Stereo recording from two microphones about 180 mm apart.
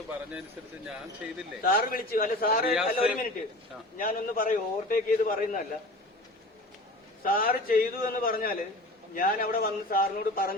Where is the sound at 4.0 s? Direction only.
50° left (ahead or behind).